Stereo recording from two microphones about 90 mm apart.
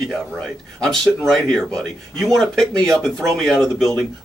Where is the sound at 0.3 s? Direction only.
10° left (ahead or behind).